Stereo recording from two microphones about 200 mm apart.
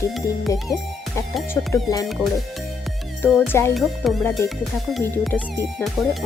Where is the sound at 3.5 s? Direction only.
15° left (ahead or behind).